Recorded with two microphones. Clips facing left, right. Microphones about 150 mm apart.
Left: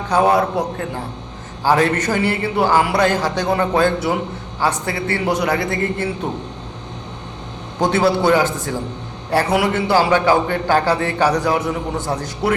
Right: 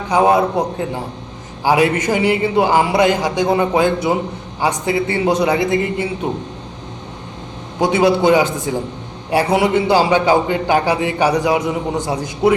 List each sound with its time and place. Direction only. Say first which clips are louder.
0.1 s a man's voice: right 2 dB; 20° right (ahead or behind)
7.8 s a man's voice: right 2 dB; 15° right (ahead or behind)